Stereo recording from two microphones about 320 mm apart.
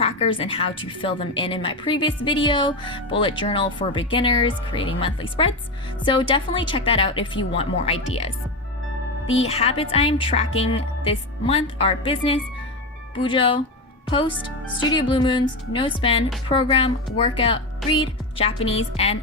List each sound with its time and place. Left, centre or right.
0.0 s a woman's voice: centre
9.4 s a woman's voice: centre